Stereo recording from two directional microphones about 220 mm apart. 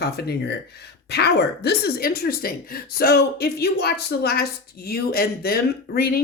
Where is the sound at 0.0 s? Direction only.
50° left (ahead or behind).